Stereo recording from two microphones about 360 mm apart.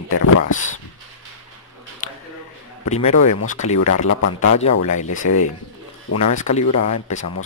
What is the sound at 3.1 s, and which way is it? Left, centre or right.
Speech, left.